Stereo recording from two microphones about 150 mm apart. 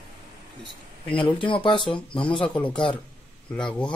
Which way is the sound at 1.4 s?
35° left (ahead or behind).